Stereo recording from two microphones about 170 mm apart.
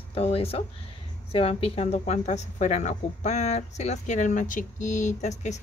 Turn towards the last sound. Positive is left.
turn(degrees=45)  # may be behind; listen again after turning